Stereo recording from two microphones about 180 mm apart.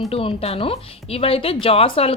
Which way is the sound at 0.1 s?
30° left (ahead or behind).